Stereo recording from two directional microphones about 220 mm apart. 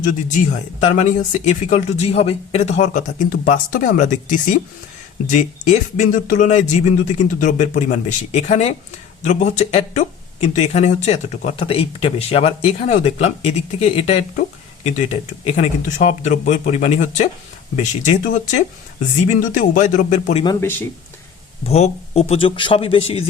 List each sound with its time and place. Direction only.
0.0 s speech: 35° left (ahead or behind)
20.4 s speech: 15° left (ahead or behind)
21.6 s speech: 30° left (ahead or behind)